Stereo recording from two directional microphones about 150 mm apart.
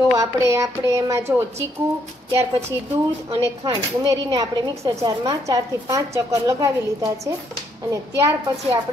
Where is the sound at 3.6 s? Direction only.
25° right (ahead or behind).